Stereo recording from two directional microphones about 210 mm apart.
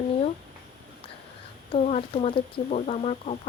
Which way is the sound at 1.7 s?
30° left (ahead or behind).